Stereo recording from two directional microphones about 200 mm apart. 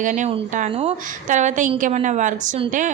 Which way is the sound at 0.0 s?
40° right (ahead or behind).